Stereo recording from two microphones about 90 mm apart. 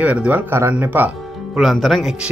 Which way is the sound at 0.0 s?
15° right (ahead or behind).